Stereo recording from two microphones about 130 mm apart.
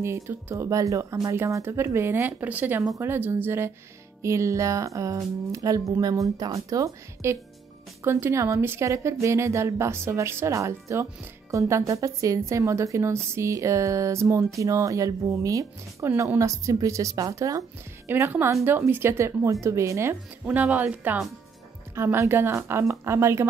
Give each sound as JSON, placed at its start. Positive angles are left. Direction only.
{"t": 0.0, "sound": "a woman's voice", "side_deg": -20}